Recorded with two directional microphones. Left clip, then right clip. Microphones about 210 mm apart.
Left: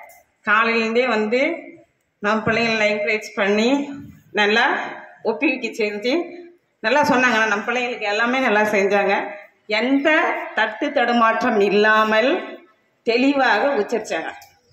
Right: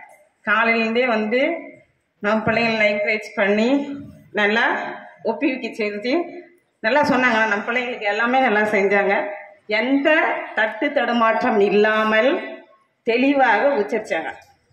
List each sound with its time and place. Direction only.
0.5 s a woman's voice: 20° left (ahead or behind)